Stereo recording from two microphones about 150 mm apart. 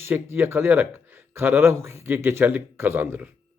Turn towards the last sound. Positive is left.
turn(degrees=-10)  # may be behind; listen again after turning